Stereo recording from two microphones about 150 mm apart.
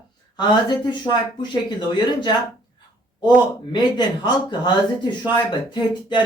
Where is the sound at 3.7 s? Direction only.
30° left (ahead or behind).